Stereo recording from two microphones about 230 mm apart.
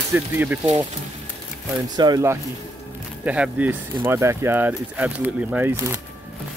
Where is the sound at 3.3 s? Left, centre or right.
Centre.